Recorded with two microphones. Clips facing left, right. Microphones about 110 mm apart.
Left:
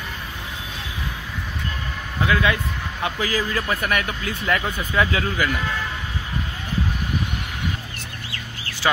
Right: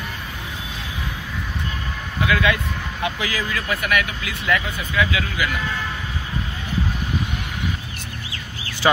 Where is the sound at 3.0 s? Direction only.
40° left (ahead or behind).